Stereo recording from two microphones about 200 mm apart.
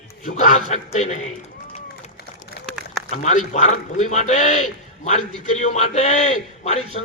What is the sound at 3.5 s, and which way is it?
A man's voice, 35° left (ahead or behind).